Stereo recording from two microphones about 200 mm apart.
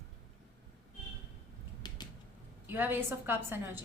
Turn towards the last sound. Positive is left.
turn(degrees=-10)  # may be behind; listen again after turning